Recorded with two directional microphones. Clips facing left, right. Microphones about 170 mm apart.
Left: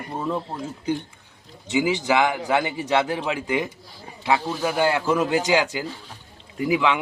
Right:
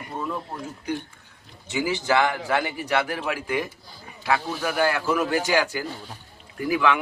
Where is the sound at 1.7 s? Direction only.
15° left (ahead or behind).